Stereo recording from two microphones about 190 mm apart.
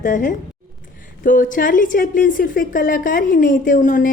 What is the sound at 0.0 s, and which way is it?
A woman's voice, 45° left (ahead or behind).